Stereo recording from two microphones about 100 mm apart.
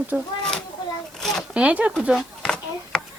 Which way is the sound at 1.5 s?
15° right (ahead or behind).